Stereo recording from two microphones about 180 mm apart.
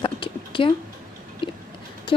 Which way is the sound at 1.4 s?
30° left (ahead or behind).